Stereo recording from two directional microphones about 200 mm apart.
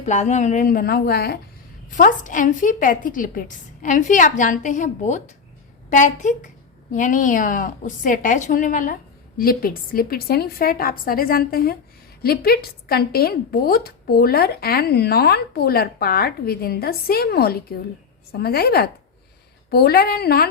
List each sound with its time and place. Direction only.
0.0 s a woman's voice: 35° left (ahead or behind); by 1.4 s 50° left (ahead or behind)
1.9 s a woman's voice: 40° left (ahead or behind)